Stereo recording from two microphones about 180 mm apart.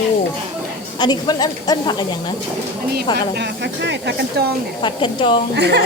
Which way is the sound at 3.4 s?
75° right (ahead or behind).